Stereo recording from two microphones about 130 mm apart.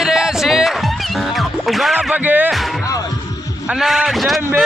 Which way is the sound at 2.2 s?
15° right (ahead or behind).